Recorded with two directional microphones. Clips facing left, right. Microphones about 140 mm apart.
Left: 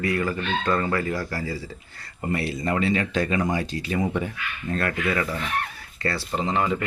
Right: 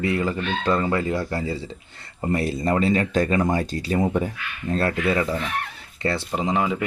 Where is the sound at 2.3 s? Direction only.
40° right (ahead or behind); by 6.8 s 10° right (ahead or behind).